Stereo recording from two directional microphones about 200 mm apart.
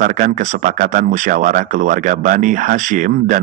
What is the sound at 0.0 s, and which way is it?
Speech, 40° right (ahead or behind).